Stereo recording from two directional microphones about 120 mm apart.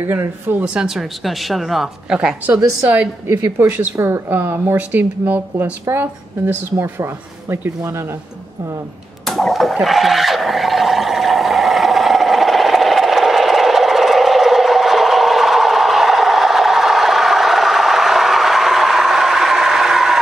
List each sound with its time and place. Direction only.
0.0 s speech: 20° right (ahead or behind)
0.8 s a woman's voice: centre (ahead or behind)
3.3 s speech: 20° right (ahead or behind)
9.2 s a sound: centre (ahead or behind)